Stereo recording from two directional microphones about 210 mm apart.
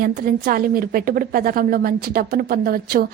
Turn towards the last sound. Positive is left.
turn(degrees=-45)  # may be behind; listen again after turning